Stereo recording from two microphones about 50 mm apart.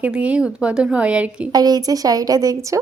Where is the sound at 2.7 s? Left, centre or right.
Right.